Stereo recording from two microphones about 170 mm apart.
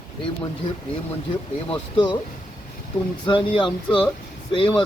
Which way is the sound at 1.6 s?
30° left (ahead or behind).